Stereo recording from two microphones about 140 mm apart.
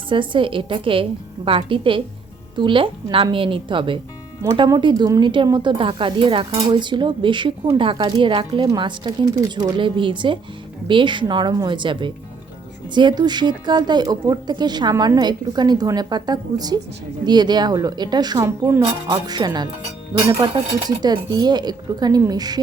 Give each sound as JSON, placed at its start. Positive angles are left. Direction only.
{"t": 0.1, "sound": "speech", "side_deg": -35}